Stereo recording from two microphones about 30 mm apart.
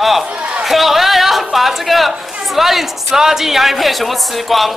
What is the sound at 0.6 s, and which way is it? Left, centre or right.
A woman's voice, centre.